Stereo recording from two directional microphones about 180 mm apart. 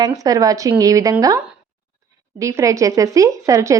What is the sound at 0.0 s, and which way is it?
Speech, 20° right (ahead or behind).